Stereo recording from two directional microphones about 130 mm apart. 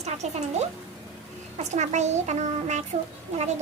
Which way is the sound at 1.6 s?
60° right (ahead or behind).